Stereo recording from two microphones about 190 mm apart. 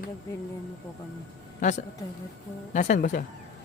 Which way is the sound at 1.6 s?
40° left (ahead or behind).